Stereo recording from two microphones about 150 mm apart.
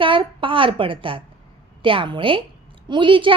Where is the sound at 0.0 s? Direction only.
35° right (ahead or behind).